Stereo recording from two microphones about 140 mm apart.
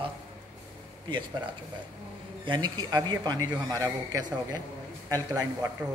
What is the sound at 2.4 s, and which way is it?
A man's voice, 30° right (ahead or behind).